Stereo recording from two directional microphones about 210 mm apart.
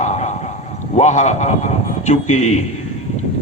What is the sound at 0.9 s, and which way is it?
A man's voice, 35° left (ahead or behind).